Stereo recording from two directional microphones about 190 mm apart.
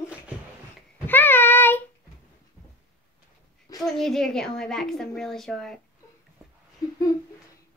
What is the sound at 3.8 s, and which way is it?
A woman's voice, centre (ahead or behind).